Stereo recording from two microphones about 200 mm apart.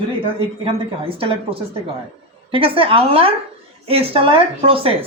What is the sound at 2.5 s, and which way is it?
Speech, 25° right (ahead or behind).